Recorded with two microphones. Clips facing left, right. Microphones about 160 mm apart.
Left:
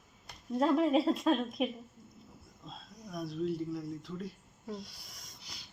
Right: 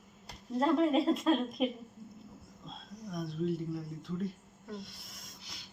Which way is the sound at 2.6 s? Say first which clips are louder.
Right 3 dB; 5° left (ahead or behind).